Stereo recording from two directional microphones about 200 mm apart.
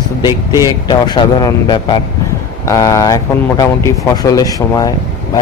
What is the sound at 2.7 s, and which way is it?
Speech, 15° left (ahead or behind).